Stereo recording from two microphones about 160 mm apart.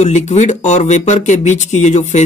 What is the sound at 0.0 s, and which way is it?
Speech, 45° left (ahead or behind).